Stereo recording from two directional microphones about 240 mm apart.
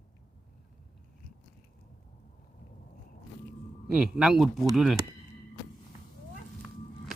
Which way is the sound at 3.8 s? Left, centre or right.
Centre.